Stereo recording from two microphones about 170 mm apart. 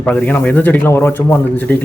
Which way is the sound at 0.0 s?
10° left (ahead or behind).